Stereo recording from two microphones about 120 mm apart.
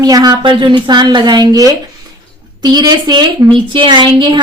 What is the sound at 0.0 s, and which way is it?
A woman's voice, 35° right (ahead or behind).